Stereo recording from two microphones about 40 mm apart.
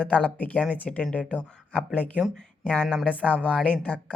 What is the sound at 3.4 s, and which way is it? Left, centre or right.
Speech, left.